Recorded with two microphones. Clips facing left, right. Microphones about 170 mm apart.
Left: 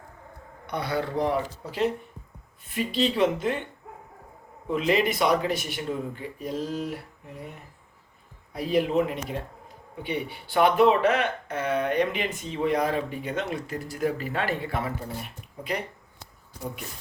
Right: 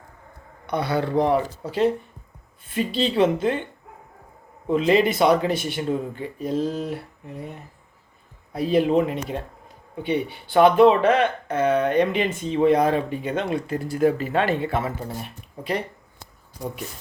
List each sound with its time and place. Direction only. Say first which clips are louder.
0.9 s speech: right 5 dB; 70° right (ahead or behind)
1.3 s speech: right 6 dB; 30° right (ahead or behind)
4.7 s speech: right 5 dB; 30° right (ahead or behind)
8.5 s speech: right 4 dB; 25° right (ahead or behind)